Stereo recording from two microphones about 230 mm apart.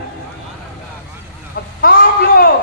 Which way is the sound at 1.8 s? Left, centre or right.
Left.